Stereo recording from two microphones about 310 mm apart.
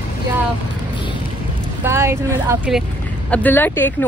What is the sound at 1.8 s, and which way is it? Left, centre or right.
Speech, centre.